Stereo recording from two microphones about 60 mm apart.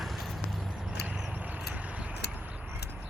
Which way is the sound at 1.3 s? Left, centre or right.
Right.